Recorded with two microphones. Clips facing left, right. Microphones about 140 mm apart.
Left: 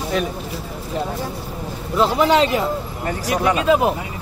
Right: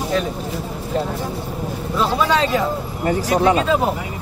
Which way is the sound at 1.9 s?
20° left (ahead or behind).